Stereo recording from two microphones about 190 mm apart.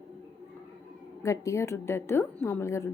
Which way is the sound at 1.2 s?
15° left (ahead or behind).